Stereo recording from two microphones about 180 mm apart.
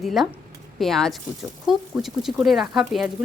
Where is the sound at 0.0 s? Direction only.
Centre (ahead or behind).